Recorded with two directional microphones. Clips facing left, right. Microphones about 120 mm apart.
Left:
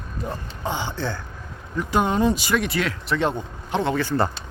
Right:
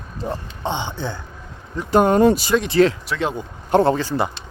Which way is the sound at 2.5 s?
25° right (ahead or behind).